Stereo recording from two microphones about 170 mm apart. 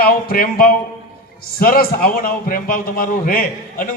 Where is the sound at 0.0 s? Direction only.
60° left (ahead or behind).